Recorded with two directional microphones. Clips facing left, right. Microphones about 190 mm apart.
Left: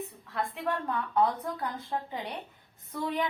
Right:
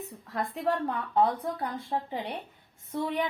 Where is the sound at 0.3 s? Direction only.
35° right (ahead or behind).